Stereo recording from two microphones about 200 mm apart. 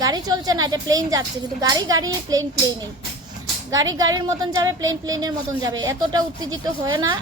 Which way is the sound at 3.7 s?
20° right (ahead or behind).